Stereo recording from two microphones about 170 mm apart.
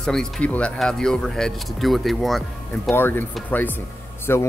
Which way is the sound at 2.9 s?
10° left (ahead or behind).